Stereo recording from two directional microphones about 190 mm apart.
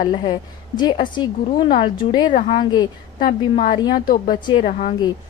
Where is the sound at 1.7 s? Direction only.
45° left (ahead or behind).